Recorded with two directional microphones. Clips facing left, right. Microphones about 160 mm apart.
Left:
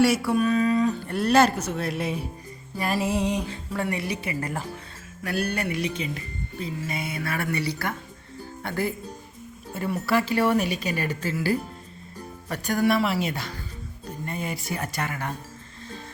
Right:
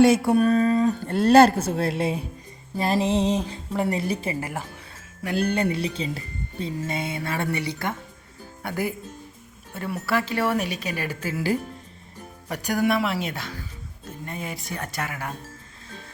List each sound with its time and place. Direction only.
0.3 s speech: 35° right (ahead or behind)
4.0 s a woman's voice: 35° right (ahead or behind)
4.4 s speech: 10° right (ahead or behind)
5.2 s speech: 20° right (ahead or behind)
9.7 s speech: centre (ahead or behind)
12.5 s speech: 10° right (ahead or behind)
12.9 s speech: centre (ahead or behind)